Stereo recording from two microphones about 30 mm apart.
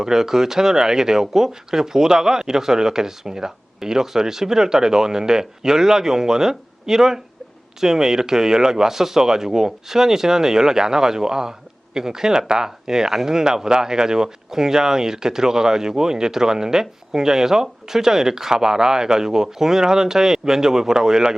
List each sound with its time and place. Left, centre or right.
0.0 s speech: centre